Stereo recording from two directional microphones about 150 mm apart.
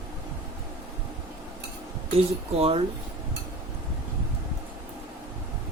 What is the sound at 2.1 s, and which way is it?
Speech, 40° right (ahead or behind).